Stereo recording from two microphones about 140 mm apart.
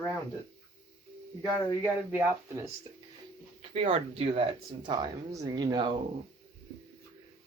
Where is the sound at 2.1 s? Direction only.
20° right (ahead or behind).